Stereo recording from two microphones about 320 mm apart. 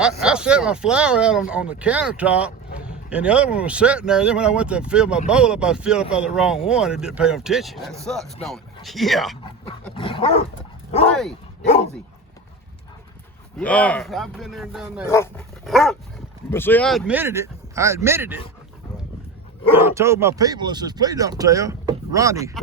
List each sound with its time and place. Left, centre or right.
0.0 s speech: centre
9.9 s dog: centre
13.6 s speech: centre
19.7 s speech: centre